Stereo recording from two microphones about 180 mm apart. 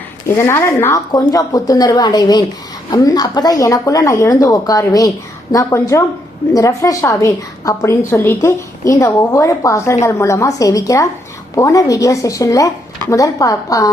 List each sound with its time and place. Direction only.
0.3 s a woman's voice: 15° left (ahead or behind)